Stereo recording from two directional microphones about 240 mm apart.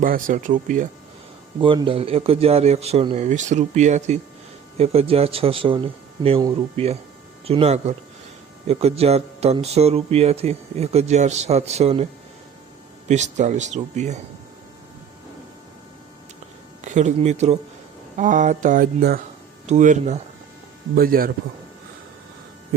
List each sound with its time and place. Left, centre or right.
0.0 s speech: right
1.6 s speech: right
13.1 s speech: right
16.8 s speech: right